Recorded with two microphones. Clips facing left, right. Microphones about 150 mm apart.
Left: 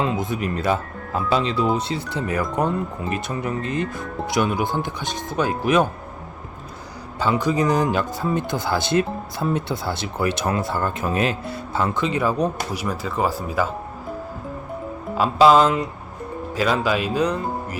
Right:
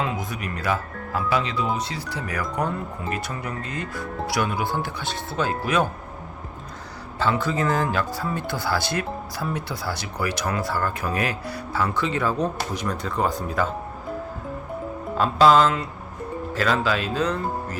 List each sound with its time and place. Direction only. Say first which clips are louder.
0.0 s speech: left 5 dB; 25° left (ahead or behind)
7.2 s speech: left 3 dB; 15° left (ahead or behind)
15.2 s speech: left 2 dB; 10° left (ahead or behind)